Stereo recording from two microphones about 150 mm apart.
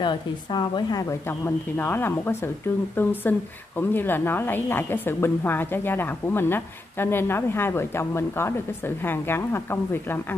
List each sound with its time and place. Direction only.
0.0 s a woman's voice: 30° left (ahead or behind)
1.4 s a woman's voice: 15° left (ahead or behind)